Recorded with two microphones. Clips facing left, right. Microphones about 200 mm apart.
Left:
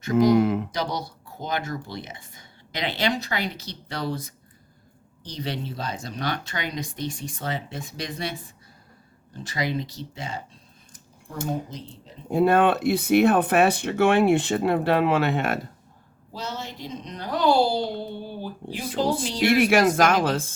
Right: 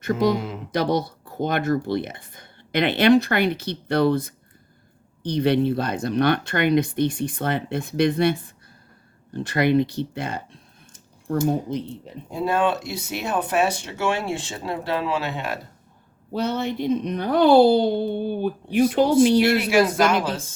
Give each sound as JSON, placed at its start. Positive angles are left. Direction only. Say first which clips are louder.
{"t": 0.0, "sound": "speech", "louder": "left 2 dB", "side_deg": -55}
{"t": 0.3, "sound": "speech", "louder": "left 9 dB", "side_deg": 60}
{"t": 0.7, "sound": "speech", "louder": "right 7 dB", "side_deg": -55}
{"t": 11.7, "sound": "speech", "louder": "right 11 dB", "side_deg": -60}
{"t": 12.3, "sound": "speech", "louder": "left 3 dB", "side_deg": 60}
{"t": 16.3, "sound": "speech", "louder": "right 10 dB", "side_deg": -60}
{"t": 19.5, "sound": "speech", "louder": "even", "side_deg": 55}